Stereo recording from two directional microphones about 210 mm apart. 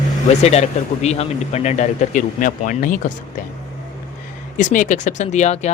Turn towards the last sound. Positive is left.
turn(degrees=30)  # may be behind; listen again after turning